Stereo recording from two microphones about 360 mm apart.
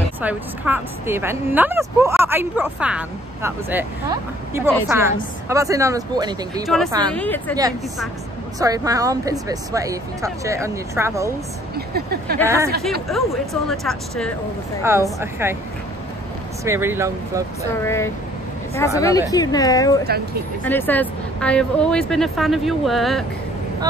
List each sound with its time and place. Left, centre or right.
0.2 s a woman's voice: centre
7.1 s speech: centre
8.5 s a woman's voice: centre
11.7 s speech: right
12.4 s a woman's voice: centre
16.6 s a woman's voice: centre
17.8 s speech: centre